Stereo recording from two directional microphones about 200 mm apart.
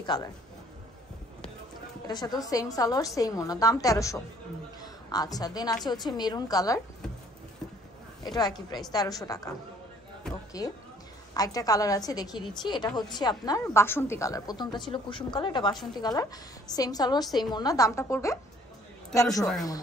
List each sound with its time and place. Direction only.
0.0 s a woman's voice: 20° left (ahead or behind)
2.0 s a woman's voice: 20° left (ahead or behind)
8.2 s a woman's voice: 20° left (ahead or behind)
10.6 s a woman's voice: 15° left (ahead or behind)